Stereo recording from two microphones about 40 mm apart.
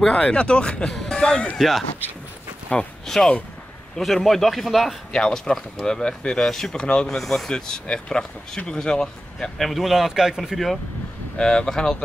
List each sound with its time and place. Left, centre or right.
0.1 s speech: left
1.6 s a man's voice: centre
2.7 s speech: left
3.1 s speech: centre
4.0 s a man's voice: centre
5.1 s speech: centre
7.2 s speech: centre
9.6 s speech: centre
11.3 s speech: centre